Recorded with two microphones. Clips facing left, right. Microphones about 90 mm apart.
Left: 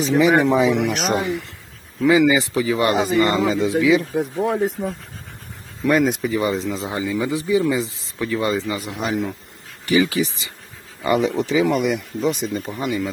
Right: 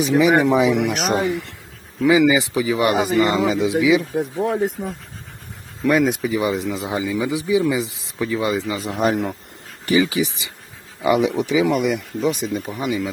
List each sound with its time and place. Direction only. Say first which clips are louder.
0.2 s speech: even; 15° right (ahead or behind); by 1.5 s centre (ahead or behind)
2.0 s speech: even; 10° right (ahead or behind)
4.1 s speech: even; centre (ahead or behind)
6.4 s speech: even; 15° right (ahead or behind)
7.4 s speech: right 1 dB; 5° right (ahead or behind)
7.7 s speech: even; 15° right (ahead or behind)
9.0 s speech: right 5 dB; 50° right (ahead or behind)
10.0 s speech: even; 15° right (ahead or behind)